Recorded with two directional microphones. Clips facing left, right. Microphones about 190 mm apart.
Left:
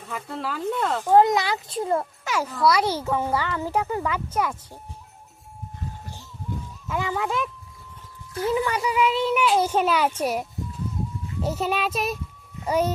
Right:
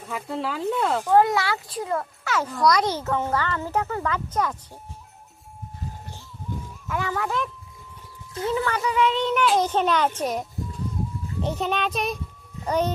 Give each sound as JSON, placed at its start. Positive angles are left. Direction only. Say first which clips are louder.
{"t": 0.1, "sound": "speech", "louder": "right 2 dB", "side_deg": 0}
{"t": 1.0, "sound": "a child's voice", "louder": "left 3 dB", "side_deg": 20}
{"t": 2.5, "sound": "speech", "louder": "even", "side_deg": 5}
{"t": 6.8, "sound": "a child's voice", "louder": "left 1 dB", "side_deg": 15}